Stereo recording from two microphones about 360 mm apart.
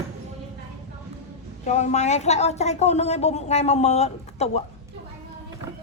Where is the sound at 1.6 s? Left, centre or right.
Centre.